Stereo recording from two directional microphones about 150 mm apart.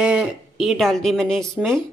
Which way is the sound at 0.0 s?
5° right (ahead or behind).